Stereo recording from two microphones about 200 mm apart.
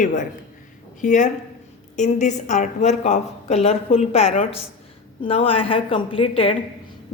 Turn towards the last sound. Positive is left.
turn(degrees=25)  # may be behind; listen again after turning